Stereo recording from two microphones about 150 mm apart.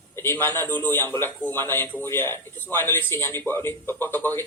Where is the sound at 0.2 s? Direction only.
15° left (ahead or behind).